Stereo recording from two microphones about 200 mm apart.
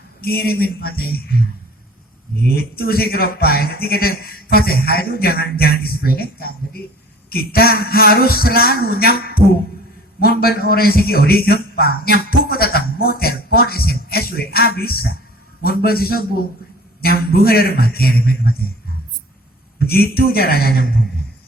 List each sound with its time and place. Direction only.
0.2 s a man's voice: 50° left (ahead or behind)
2.6 s a man's voice: 50° left (ahead or behind)
19.8 s a man's voice: 50° left (ahead or behind)